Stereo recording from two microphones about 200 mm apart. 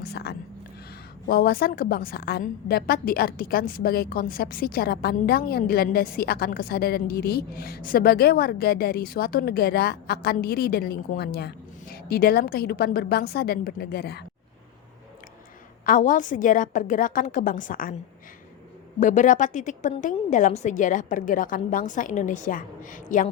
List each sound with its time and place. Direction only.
0.0 s a sound: 55° left (ahead or behind)
1.3 s a woman's voice: 50° left (ahead or behind)
15.9 s a woman's voice: 40° left (ahead or behind)
18.9 s a woman's voice: 40° left (ahead or behind)